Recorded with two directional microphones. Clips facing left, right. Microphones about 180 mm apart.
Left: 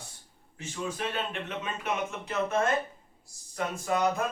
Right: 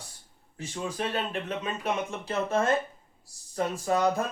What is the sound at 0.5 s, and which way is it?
Speech, 35° right (ahead or behind).